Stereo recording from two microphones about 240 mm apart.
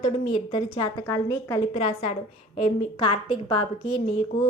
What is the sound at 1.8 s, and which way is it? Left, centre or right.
A woman's voice, left.